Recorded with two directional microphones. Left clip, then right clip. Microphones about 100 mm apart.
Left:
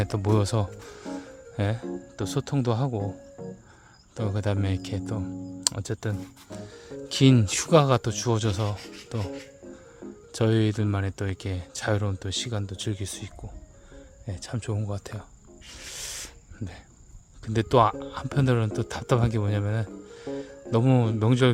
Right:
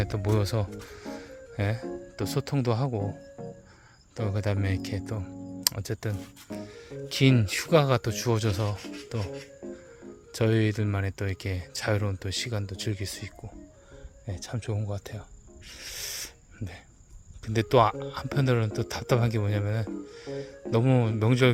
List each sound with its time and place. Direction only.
0.0 s speech: 45° left (ahead or behind); by 3.1 s 20° left (ahead or behind)
3.4 s cricket: centre (ahead or behind)
4.2 s speech: 30° left (ahead or behind)
7.3 s speech: 55° left (ahead or behind); by 8.7 s 25° left (ahead or behind)
9.0 s music: 30° left (ahead or behind)
10.3 s speech: 35° left (ahead or behind)
15.7 s snake: 35° left (ahead or behind)
17.4 s speech: 30° left (ahead or behind)